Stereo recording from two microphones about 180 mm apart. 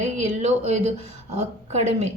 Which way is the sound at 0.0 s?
40° right (ahead or behind).